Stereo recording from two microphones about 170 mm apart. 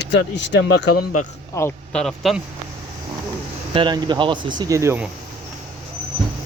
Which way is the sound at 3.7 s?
25° right (ahead or behind).